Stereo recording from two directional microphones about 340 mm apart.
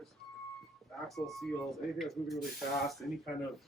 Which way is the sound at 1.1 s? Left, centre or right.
Centre.